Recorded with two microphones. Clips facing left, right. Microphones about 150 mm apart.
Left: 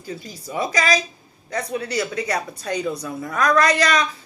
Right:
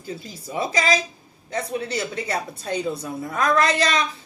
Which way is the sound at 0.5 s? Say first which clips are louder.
Left 1 dB; 25° right (ahead or behind).